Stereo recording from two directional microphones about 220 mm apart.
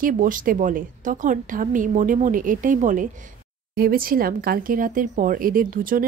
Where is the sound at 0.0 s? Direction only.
40° right (ahead or behind).